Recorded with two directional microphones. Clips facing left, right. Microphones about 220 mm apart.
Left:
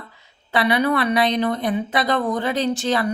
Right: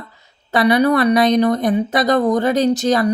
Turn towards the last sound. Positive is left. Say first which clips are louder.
# right 6 dB
turn(degrees=-40)  # may be behind; listen again after turning